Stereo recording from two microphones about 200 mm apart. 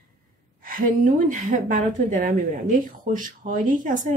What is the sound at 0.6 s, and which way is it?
Speech, 45° right (ahead or behind).